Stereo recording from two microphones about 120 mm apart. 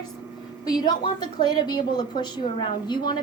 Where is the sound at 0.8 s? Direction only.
35° left (ahead or behind).